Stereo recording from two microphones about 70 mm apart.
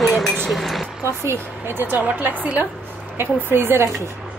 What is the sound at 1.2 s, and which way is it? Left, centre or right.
Speech, right.